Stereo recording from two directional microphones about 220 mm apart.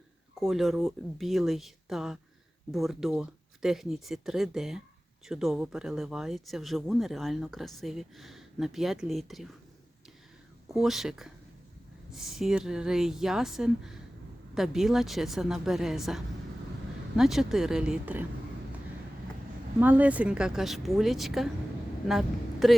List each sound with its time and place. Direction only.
0.3 s speech: centre (ahead or behind)
10.7 s speech: centre (ahead or behind)
19.8 s speech: 5° right (ahead or behind)
22.6 s speech: centre (ahead or behind)